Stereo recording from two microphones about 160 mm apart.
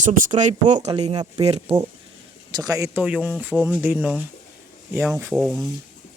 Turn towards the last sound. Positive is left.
turn(degrees=0)  # may be behind; listen again after turning